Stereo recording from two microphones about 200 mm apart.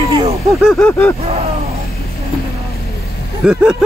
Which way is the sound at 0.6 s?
5° left (ahead or behind).